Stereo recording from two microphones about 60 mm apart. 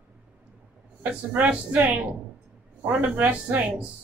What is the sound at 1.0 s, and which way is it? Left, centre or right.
Speech, right.